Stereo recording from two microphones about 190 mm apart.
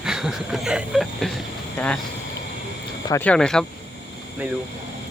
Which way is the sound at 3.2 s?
5° left (ahead or behind).